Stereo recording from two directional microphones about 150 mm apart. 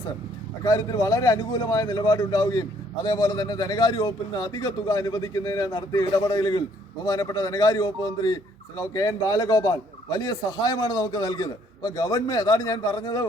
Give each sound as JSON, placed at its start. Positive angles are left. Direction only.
{"t": 0.6, "sound": "speech", "side_deg": 25}